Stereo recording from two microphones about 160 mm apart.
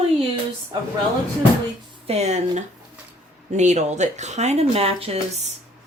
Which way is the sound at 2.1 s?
45° right (ahead or behind).